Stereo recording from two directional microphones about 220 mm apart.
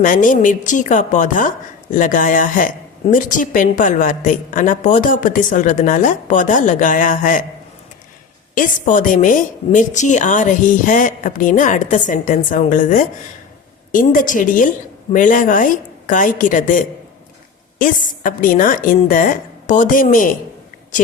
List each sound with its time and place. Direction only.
0.0 s a woman's voice: 35° left (ahead or behind)
8.5 s a woman's voice: 35° left (ahead or behind)